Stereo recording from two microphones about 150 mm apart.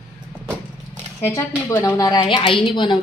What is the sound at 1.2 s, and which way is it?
Speech, 20° left (ahead or behind).